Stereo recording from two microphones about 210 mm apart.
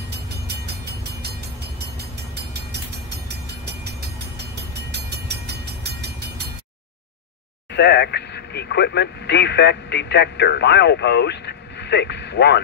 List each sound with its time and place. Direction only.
5.9 s train: 50° right (ahead or behind)
7.7 s speech: 55° left (ahead or behind)